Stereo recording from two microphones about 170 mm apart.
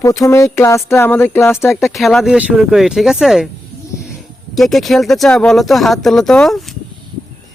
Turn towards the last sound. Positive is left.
turn(degrees=5)  # may be behind; listen again after turning